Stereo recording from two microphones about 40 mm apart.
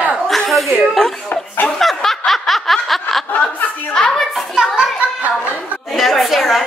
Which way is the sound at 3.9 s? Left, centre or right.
Centre.